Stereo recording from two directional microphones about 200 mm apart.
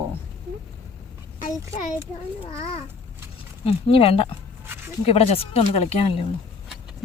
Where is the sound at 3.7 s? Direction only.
30° left (ahead or behind).